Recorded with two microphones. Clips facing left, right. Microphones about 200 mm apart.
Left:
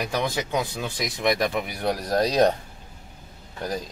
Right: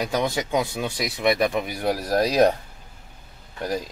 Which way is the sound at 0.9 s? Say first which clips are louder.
Right 2 dB; 5° right (ahead or behind).